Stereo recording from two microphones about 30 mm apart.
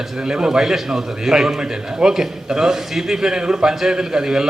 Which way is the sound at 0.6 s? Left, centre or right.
Centre.